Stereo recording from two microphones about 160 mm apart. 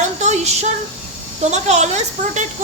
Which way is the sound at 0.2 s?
45° right (ahead or behind).